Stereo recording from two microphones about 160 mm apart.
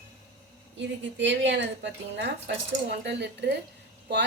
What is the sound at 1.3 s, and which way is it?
Speech, 90° right.